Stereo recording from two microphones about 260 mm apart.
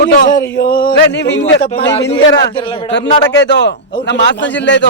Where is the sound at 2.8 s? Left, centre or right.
Left.